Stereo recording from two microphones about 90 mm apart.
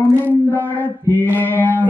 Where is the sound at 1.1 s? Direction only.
20° left (ahead or behind).